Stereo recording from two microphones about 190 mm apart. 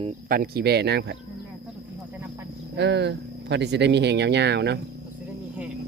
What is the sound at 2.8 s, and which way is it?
Speech, 65° right (ahead or behind).